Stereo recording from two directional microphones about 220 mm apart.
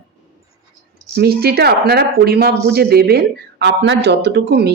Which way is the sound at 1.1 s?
45° right (ahead or behind).